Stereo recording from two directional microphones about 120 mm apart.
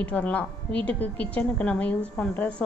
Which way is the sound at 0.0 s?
10° left (ahead or behind).